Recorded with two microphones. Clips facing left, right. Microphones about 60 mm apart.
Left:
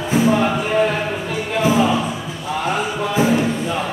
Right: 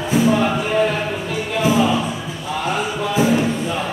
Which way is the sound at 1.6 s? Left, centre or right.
Left.